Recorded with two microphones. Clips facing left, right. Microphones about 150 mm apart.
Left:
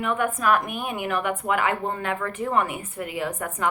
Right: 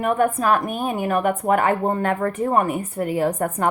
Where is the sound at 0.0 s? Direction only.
40° right (ahead or behind).